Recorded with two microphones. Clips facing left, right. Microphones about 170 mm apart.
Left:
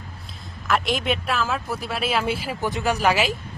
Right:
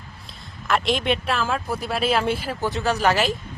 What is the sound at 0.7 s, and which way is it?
Speech, centre (ahead or behind).